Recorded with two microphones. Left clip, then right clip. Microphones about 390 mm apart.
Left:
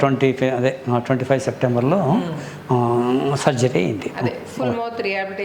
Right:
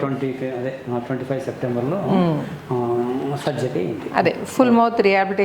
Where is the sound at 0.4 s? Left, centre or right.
Left.